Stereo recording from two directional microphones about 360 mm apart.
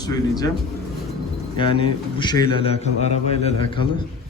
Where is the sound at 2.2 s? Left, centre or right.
Centre.